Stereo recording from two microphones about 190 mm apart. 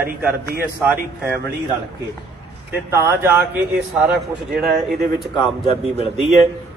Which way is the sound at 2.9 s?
15° right (ahead or behind).